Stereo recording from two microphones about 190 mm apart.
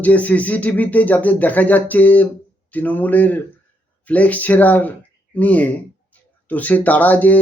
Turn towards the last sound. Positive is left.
turn(degrees=10)  # may be behind; listen again after turning